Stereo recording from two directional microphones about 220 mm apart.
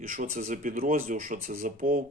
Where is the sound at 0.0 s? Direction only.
35° right (ahead or behind).